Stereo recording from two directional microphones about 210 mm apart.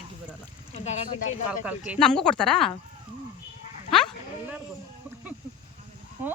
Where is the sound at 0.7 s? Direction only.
35° left (ahead or behind).